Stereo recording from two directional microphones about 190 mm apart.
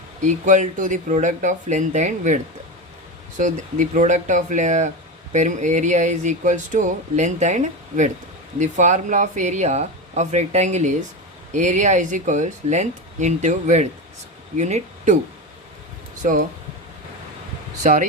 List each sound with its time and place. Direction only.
0.2 s speech: 40° right (ahead or behind)
16.2 s speech: 40° right (ahead or behind)
17.8 s speech: 40° right (ahead or behind)